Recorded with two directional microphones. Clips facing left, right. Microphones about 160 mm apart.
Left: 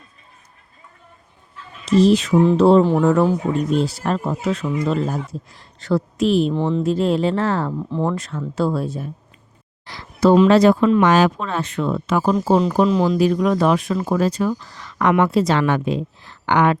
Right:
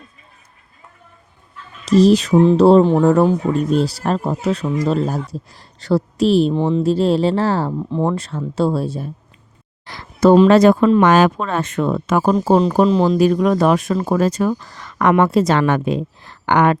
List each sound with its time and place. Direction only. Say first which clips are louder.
1.8 s a woman's voice: right 2 dB; 40° right (ahead or behind)
2.3 s speech: right 3 dB; 20° right (ahead or behind)
2.6 s a woman's voice: right 2 dB; 35° right (ahead or behind)
6.5 s speech: right 3 dB; 15° right (ahead or behind)
6.8 s a woman's voice: right 3 dB; 30° right (ahead or behind)
7.9 s speech: right 3 dB; 15° right (ahead or behind)
8.1 s speech: right 2 dB; 30° right (ahead or behind)
9.8 s a sound: right 3 dB; 50° right (ahead or behind)
10.5 s speech: right 2 dB; 50° right (ahead or behind); by 13.1 s 35° right (ahead or behind)
13.1 s speech: right 3 dB; 50° right (ahead or behind)